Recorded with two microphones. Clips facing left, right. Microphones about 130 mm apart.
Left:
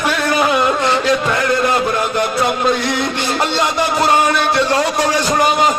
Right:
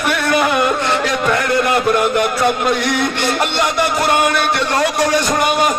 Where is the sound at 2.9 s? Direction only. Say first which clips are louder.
Right 1 dB; 60° right (ahead or behind).